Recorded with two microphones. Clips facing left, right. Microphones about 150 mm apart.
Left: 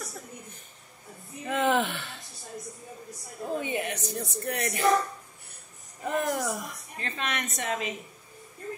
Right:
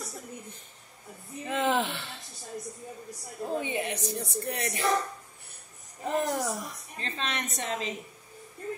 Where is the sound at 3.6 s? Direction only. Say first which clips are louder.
Even; 25° right (ahead or behind).